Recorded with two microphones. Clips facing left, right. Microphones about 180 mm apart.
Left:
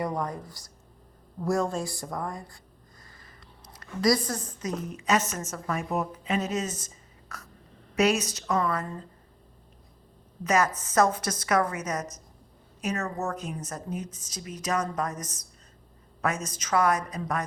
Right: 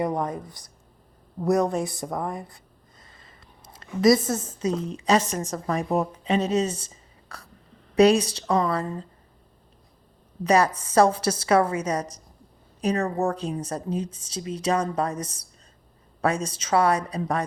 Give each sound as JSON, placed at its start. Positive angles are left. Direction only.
{"t": 0.0, "sound": "a woman's voice", "side_deg": -20}
{"t": 3.0, "sound": "a sound", "side_deg": -25}
{"t": 4.0, "sound": "a woman's voice", "side_deg": -25}
{"t": 10.4, "sound": "a woman's voice", "side_deg": -35}